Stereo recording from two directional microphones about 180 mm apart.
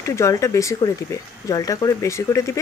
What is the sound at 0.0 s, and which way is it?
A woman's voice, 15° left (ahead or behind).